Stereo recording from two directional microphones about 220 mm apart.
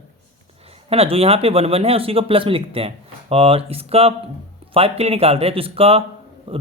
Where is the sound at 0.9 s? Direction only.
25° right (ahead or behind).